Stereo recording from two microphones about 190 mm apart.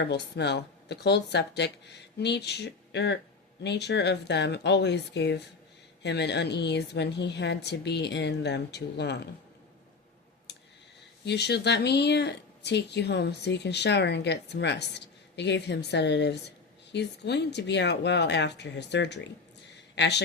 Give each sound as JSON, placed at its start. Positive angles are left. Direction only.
{"t": 0.0, "sound": "speech", "side_deg": 60}
{"t": 11.3, "sound": "speech", "side_deg": 60}